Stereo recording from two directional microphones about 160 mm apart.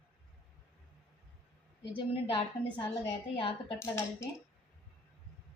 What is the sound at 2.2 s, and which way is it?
A woman's voice, 30° left (ahead or behind).